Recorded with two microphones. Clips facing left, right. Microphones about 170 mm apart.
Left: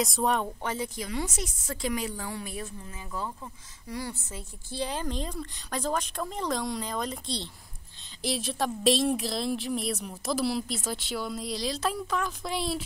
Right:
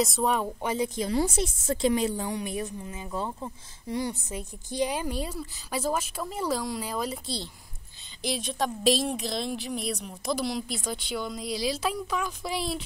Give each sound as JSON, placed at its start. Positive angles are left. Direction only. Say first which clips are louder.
{"t": 0.0, "sound": "a woman's voice", "louder": "right 1 dB", "side_deg": 0}
{"t": 0.6, "sound": "a woman's voice", "louder": "right 5 dB", "side_deg": -15}
{"t": 1.0, "sound": "a woman's voice", "louder": "right 7 dB", "side_deg": -30}